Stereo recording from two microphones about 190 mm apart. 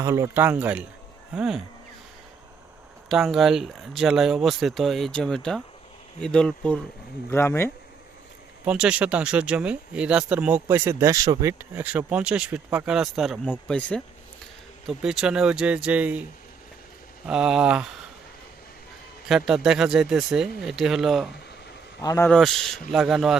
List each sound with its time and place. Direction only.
0.0 s speech: 15° right (ahead or behind)
3.1 s speech: centre (ahead or behind)
8.6 s speech: 5° right (ahead or behind)
11.7 s speech: 10° right (ahead or behind)
17.2 s speech: 5° right (ahead or behind)
19.3 s speech: 5° right (ahead or behind)
22.0 s speech: 15° left (ahead or behind)
22.3 s speech: centre (ahead or behind)